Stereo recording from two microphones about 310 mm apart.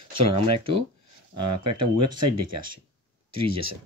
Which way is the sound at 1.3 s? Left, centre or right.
Right.